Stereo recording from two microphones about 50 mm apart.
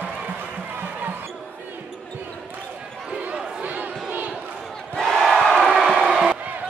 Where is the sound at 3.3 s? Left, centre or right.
Right.